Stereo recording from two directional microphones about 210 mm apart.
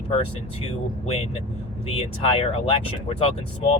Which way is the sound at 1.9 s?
25° left (ahead or behind).